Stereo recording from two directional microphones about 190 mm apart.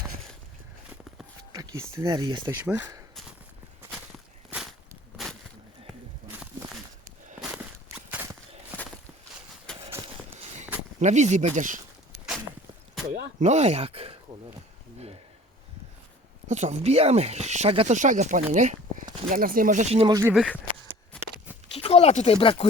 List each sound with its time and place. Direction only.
1.5 s speech: 15° right (ahead or behind)
4.4 s walk: centre (ahead or behind)
5.1 s a sound: centre (ahead or behind)
7.5 s walk: 10° right (ahead or behind)
9.7 s run: 5° left (ahead or behind)
11.0 s speech: 40° right (ahead or behind)
13.1 s speech: 35° right (ahead or behind)
16.5 s speech: 35° right (ahead or behind)
20.1 s speech: 15° right (ahead or behind)
20.3 s a sound: centre (ahead or behind)
21.8 s speech: 35° left (ahead or behind)